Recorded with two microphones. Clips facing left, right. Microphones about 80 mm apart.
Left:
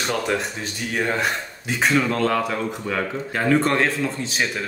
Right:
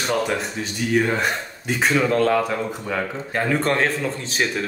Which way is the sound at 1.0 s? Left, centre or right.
Centre.